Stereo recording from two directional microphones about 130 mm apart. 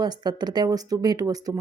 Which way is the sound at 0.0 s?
30° right (ahead or behind).